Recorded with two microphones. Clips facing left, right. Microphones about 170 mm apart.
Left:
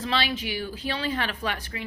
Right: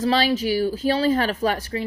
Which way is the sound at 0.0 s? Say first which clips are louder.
Right 8 dB; 40° right (ahead or behind).